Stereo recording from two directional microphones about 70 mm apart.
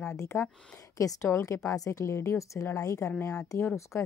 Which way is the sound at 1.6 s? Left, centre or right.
Left.